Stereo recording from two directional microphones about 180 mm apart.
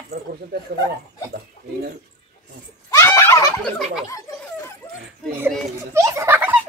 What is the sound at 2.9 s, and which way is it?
Turkey, 15° left (ahead or behind).